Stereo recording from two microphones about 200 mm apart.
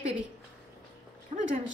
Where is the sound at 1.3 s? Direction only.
35° right (ahead or behind).